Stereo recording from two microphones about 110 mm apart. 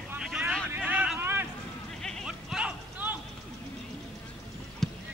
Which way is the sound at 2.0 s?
Centre (ahead or behind).